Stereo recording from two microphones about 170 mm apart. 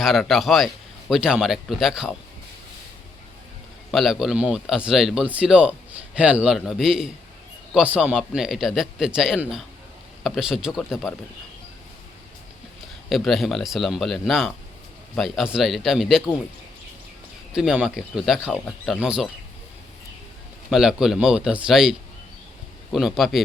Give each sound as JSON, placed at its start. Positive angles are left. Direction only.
{"t": 0.0, "sound": "a man's voice", "side_deg": 0}
{"t": 3.9, "sound": "a man's voice", "side_deg": 0}
{"t": 13.1, "sound": "a man's voice", "side_deg": 0}
{"t": 17.5, "sound": "a man's voice", "side_deg": -5}
{"t": 20.7, "sound": "a man's voice", "side_deg": -5}